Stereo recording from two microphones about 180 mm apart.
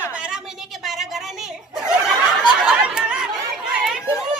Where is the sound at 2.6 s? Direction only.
5° right (ahead or behind).